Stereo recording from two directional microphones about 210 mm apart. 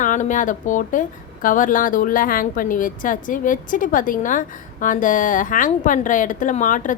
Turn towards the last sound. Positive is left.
turn(degrees=35)  # may be behind; listen again after turning